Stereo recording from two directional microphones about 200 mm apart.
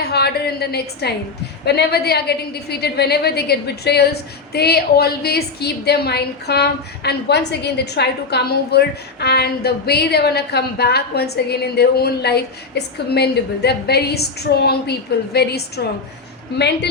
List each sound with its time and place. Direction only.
0.0 s a woman's voice: 55° left (ahead or behind)